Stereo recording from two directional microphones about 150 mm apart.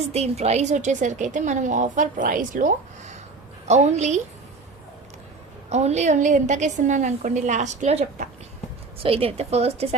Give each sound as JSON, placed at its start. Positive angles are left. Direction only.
{"t": 0.1, "sound": "a woman's voice", "side_deg": -45}
{"t": 5.6, "sound": "a woman's voice", "side_deg": -45}
{"t": 9.0, "sound": "a woman's voice", "side_deg": -40}